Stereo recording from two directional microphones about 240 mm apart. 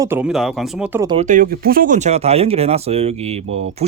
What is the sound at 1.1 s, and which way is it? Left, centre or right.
Speech, right.